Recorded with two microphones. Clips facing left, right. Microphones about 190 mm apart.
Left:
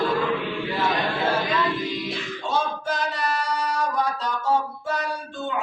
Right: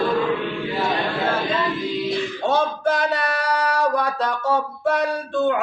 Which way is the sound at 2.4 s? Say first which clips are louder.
Right 5 dB; 65° right (ahead or behind).